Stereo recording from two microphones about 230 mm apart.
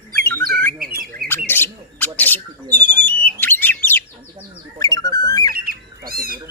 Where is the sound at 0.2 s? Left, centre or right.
Centre.